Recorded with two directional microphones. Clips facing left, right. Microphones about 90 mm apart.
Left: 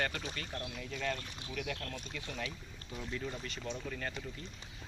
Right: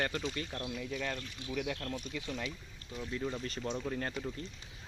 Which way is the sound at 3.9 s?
30° right (ahead or behind).